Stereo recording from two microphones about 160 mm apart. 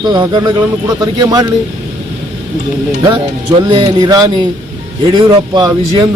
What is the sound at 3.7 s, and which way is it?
Speech, 30° right (ahead or behind).